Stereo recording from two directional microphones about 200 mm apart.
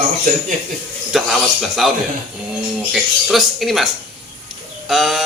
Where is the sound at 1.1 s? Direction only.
Centre (ahead or behind).